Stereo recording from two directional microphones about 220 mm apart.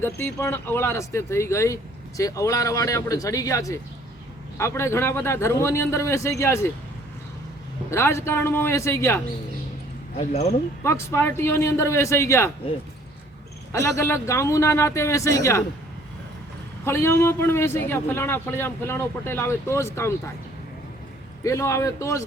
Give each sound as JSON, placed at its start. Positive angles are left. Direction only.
{"t": 0.0, "sound": "speech", "side_deg": 10}
{"t": 7.9, "sound": "speech", "side_deg": 10}
{"t": 10.2, "sound": "speech", "side_deg": 30}
{"t": 10.8, "sound": "speech", "side_deg": 10}
{"t": 13.8, "sound": "speech", "side_deg": 15}
{"t": 16.8, "sound": "speech", "side_deg": 10}
{"t": 21.4, "sound": "speech", "side_deg": 15}